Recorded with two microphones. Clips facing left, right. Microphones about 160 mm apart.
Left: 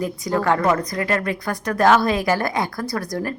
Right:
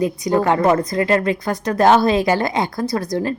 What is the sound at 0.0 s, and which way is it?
A woman's voice, 20° right (ahead or behind).